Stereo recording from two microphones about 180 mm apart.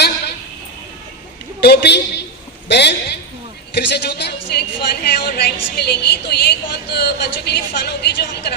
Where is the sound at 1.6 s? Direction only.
65° left (ahead or behind).